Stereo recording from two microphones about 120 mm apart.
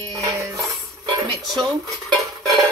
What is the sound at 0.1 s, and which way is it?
Cutlery, 30° right (ahead or behind).